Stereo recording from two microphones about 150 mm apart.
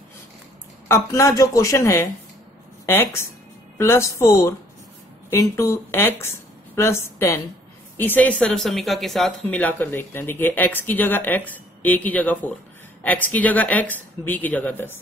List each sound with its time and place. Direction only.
0.8 s speech: 20° left (ahead or behind)